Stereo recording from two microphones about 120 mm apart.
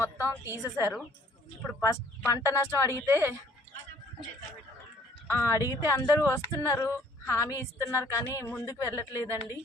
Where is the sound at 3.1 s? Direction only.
20° right (ahead or behind).